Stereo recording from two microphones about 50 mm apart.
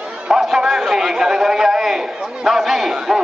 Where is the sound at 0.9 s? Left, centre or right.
Centre.